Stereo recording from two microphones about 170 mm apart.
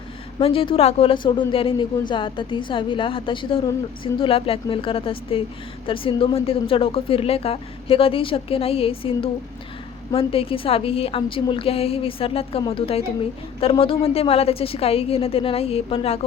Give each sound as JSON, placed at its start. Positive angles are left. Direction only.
{"t": 0.3, "sound": "a woman's voice", "side_deg": 30}